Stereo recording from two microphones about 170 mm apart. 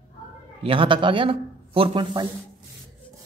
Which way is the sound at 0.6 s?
30° right (ahead or behind).